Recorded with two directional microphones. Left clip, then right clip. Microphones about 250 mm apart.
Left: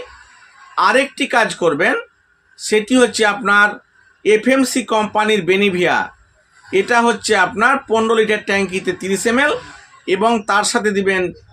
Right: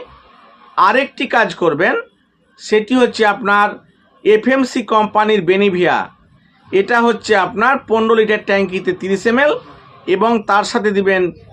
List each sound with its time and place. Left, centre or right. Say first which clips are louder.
0.8 s speech: right 1 dB; centre